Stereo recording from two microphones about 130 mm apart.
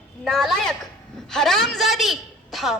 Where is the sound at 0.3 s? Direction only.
Centre (ahead or behind).